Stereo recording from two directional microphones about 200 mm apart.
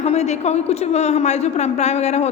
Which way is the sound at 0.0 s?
35° left (ahead or behind).